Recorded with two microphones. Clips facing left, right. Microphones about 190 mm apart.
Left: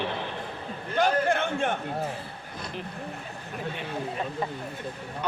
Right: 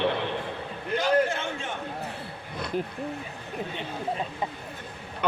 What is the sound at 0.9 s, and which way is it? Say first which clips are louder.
Speech: even; 55° left (ahead or behind).